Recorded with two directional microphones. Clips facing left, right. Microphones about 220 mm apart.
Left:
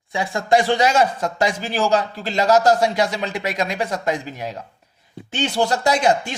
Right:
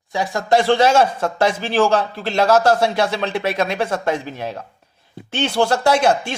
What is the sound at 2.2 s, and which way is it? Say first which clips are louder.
Speech: right 2 dB; 15° left (ahead or behind).